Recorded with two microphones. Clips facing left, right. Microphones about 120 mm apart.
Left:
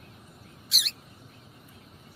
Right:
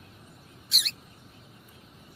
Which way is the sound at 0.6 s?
Centre (ahead or behind).